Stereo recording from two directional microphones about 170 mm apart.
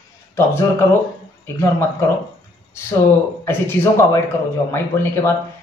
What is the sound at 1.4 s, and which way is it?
Speech, 15° left (ahead or behind).